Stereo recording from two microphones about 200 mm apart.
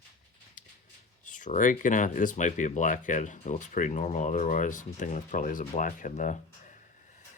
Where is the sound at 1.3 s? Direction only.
40° left (ahead or behind).